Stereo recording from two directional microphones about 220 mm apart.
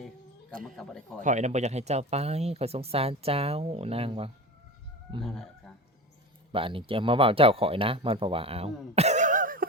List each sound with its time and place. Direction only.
0.6 s speech: centre (ahead or behind)
1.2 s speech: 35° right (ahead or behind)
5.2 s speech: centre (ahead or behind)
6.5 s speech: 25° right (ahead or behind); by 9.6 s 40° right (ahead or behind)